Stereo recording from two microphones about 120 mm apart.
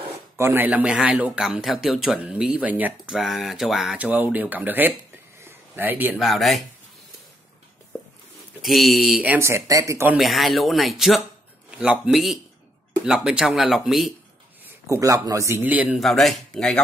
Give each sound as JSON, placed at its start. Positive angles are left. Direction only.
{"t": 0.4, "sound": "a man's voice", "side_deg": -15}
{"t": 3.2, "sound": "speech", "side_deg": 0}
{"t": 6.1, "sound": "speech", "side_deg": 0}
{"t": 8.6, "sound": "speech", "side_deg": 0}
{"t": 9.2, "sound": "speech", "side_deg": -15}
{"t": 10.1, "sound": "speech", "side_deg": 0}
{"t": 14.6, "sound": "a man's voice", "side_deg": -25}
{"t": 16.0, "sound": "speech", "side_deg": 0}